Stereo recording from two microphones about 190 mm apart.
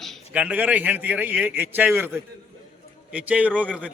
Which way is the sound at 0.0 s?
Centre (ahead or behind).